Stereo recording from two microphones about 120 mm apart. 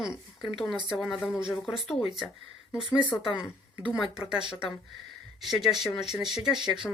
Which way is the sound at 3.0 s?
40° left (ahead or behind).